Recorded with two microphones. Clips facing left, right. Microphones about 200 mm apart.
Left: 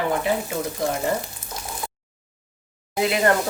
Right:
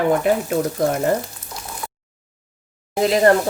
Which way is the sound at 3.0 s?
35° right (ahead or behind).